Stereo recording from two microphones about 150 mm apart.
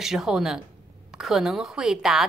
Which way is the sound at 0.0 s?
Centre (ahead or behind).